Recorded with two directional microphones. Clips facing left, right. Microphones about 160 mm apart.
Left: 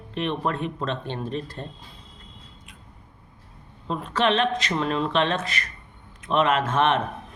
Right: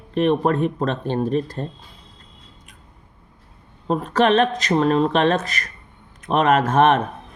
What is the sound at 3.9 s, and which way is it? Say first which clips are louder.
Speech: right 6 dB; 45° right (ahead or behind).